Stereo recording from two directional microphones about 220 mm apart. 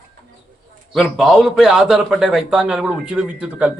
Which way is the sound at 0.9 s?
Centre (ahead or behind).